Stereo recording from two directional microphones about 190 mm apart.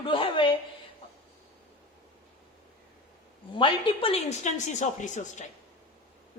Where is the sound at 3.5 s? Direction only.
25° left (ahead or behind).